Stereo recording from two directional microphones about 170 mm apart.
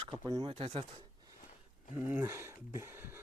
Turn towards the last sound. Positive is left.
turn(degrees=-15)  # may be behind; listen again after turning